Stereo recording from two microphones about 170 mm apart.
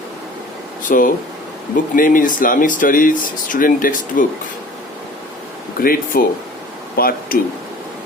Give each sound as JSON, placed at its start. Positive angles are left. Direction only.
{"t": 0.9, "sound": "speech", "side_deg": 50}
{"t": 5.8, "sound": "speech", "side_deg": 60}